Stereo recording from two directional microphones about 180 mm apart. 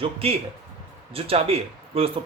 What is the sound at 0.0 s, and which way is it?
Speech, 30° right (ahead or behind).